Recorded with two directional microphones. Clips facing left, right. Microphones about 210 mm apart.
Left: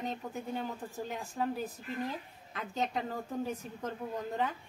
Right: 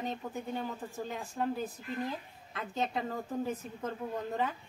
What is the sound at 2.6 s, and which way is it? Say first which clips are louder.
A woman's voice: even; centre (ahead or behind).